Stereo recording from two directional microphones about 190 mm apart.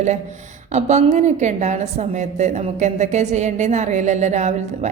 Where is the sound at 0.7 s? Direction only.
35° right (ahead or behind).